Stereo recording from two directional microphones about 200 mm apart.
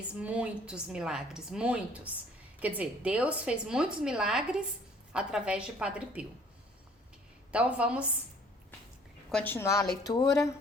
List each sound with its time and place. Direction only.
0.1 s a woman's voice: 5° right (ahead or behind)
7.5 s a woman's voice: 5° right (ahead or behind)
9.3 s a woman's voice: 10° left (ahead or behind)
9.8 s speech: 50° left (ahead or behind)
10.1 s a woman's voice: 15° left (ahead or behind)